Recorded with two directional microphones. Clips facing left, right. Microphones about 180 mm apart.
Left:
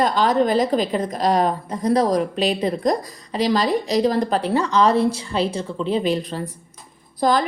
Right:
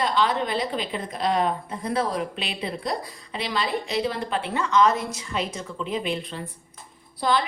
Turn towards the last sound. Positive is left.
turn(degrees=45)  # may be behind; listen again after turning